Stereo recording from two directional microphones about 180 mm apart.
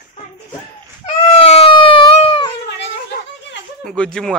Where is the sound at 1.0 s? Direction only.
35° left (ahead or behind).